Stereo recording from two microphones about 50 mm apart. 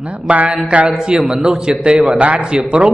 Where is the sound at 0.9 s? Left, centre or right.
Centre.